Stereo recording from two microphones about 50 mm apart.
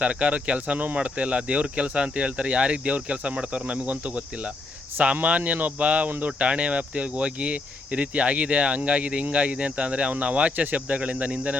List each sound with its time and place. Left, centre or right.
0.0 s speech: right
6.1 s speech: right
6.4 s speech: right